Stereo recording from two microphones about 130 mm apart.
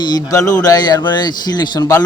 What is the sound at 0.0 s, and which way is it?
A man's voice, 30° left (ahead or behind).